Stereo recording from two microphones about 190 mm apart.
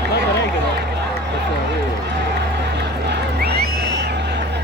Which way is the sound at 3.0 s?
60° right (ahead or behind).